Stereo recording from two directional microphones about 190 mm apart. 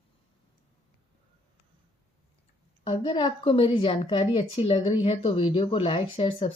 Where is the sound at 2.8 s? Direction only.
25° left (ahead or behind).